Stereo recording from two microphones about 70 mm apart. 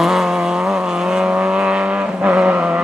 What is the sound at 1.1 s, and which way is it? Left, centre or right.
Vehicle, centre.